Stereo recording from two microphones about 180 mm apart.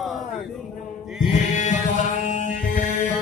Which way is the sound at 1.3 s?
40° left (ahead or behind).